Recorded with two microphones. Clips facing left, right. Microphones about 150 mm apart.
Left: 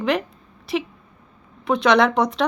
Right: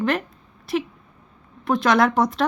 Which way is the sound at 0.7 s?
Centre (ahead or behind).